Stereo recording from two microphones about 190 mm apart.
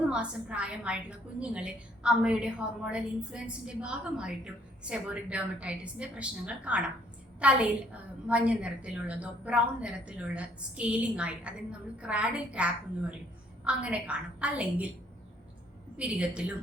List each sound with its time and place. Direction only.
0.1 s a woman's voice: 5° right (ahead or behind)
16.0 s a woman's voice: 5° right (ahead or behind)